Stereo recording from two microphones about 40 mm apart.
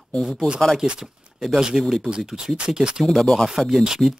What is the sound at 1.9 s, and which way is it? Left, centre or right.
Speech, centre.